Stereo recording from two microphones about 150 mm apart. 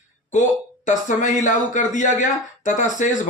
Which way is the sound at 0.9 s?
55° left (ahead or behind).